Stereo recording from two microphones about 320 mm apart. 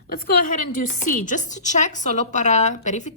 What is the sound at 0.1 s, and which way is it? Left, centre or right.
A woman's voice, left.